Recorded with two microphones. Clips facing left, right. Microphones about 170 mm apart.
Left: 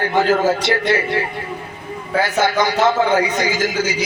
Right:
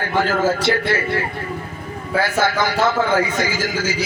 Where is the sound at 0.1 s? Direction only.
20° left (ahead or behind).